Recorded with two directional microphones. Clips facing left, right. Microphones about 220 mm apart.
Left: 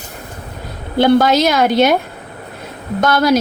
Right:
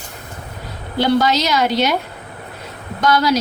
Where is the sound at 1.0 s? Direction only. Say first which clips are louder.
Left 5 dB; 50° left (ahead or behind).